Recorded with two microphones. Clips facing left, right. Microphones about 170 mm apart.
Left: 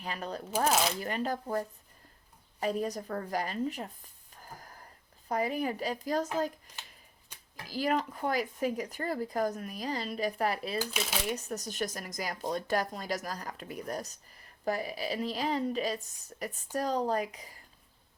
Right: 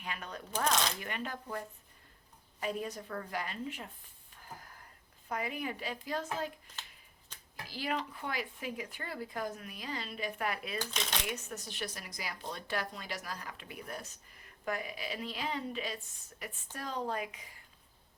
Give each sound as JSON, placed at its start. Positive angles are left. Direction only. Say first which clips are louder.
{"t": 0.0, "sound": "speech", "louder": "left 6 dB", "side_deg": 35}
{"t": 0.5, "sound": "speech", "louder": "left 4 dB", "side_deg": 5}
{"t": 0.9, "sound": "speech", "louder": "left 7 dB", "side_deg": 35}
{"t": 7.3, "sound": "a sound", "louder": "even", "side_deg": 10}
{"t": 7.7, "sound": "speech", "louder": "left 7 dB", "side_deg": 45}
{"t": 10.8, "sound": "speech", "louder": "left 4 dB", "side_deg": 5}
{"t": 11.3, "sound": "speech", "louder": "left 6 dB", "side_deg": 35}